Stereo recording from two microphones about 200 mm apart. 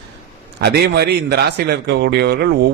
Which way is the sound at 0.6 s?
55° right (ahead or behind).